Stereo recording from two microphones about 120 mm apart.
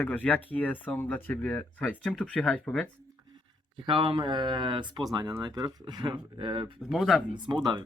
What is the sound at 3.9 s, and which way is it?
Speech, 40° right (ahead or behind).